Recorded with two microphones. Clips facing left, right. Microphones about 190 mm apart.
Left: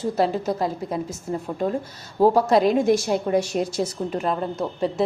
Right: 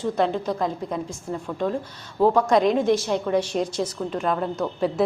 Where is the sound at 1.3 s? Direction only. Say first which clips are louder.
Left 1 dB; 25° left (ahead or behind).